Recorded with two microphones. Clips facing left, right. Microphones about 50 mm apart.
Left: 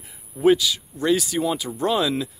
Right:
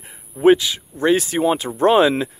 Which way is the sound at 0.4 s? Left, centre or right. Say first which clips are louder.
Right 4 dB; right.